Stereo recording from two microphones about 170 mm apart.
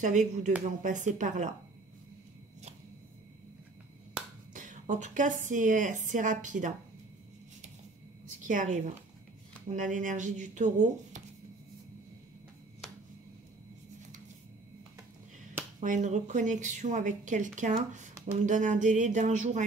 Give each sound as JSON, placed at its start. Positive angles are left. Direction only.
{"t": 0.0, "sound": "speech", "side_deg": -45}
{"t": 4.6, "sound": "speech", "side_deg": -45}
{"t": 8.4, "sound": "a woman's voice", "side_deg": -50}
{"t": 15.8, "sound": "speech", "side_deg": -45}